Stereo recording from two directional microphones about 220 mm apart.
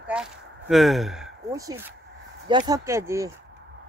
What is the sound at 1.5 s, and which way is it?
Speech, 15° right (ahead or behind).